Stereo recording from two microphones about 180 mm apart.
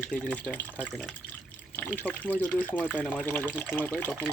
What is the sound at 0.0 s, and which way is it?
Speech, 5° left (ahead or behind).